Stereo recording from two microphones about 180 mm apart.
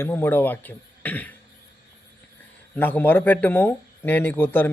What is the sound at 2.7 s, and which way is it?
Speech, 10° left (ahead or behind).